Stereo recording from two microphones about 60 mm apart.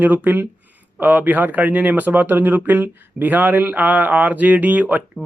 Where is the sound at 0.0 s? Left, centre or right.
Right.